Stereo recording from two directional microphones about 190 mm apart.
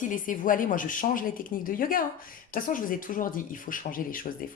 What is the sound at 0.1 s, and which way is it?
Speech, 45° left (ahead or behind).